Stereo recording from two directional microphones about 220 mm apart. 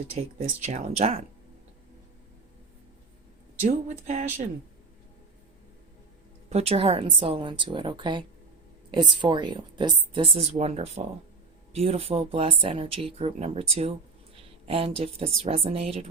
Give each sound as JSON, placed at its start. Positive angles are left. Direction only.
{"t": 0.1, "sound": "speech", "side_deg": -30}
{"t": 3.6, "sound": "speech", "side_deg": -35}
{"t": 6.5, "sound": "speech", "side_deg": -30}